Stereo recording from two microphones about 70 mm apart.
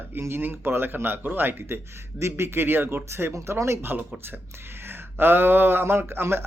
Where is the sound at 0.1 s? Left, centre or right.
Right.